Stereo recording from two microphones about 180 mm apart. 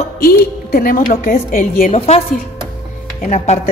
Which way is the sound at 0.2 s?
55° left (ahead or behind).